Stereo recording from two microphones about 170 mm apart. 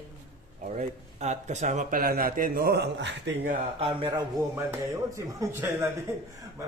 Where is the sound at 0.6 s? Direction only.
45° right (ahead or behind); by 3.5 s 90° right.